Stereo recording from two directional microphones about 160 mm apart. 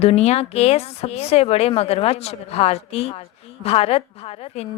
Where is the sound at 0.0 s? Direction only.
40° left (ahead or behind).